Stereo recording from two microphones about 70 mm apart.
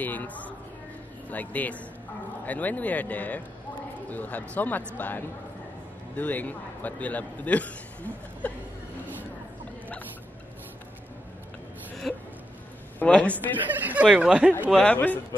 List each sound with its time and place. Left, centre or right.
0.0 s a woman's voice: left
12.1 s a sound: centre
13.0 s a man's voice: centre
13.7 s speech: right
14.0 s speech: centre
14.8 s a man's voice: left